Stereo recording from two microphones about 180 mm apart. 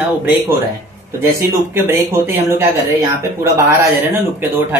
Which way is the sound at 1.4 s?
15° right (ahead or behind).